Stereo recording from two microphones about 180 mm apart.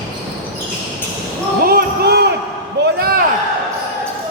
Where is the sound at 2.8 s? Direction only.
60° right (ahead or behind).